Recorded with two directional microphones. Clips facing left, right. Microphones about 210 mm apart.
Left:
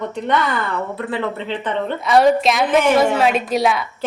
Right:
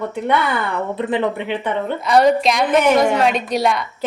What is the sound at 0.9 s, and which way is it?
A woman's voice, 20° right (ahead or behind).